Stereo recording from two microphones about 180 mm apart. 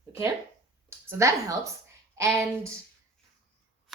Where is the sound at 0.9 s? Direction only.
15° right (ahead or behind).